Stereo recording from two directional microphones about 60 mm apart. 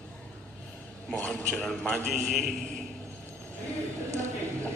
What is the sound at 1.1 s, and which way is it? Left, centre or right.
Speech, left.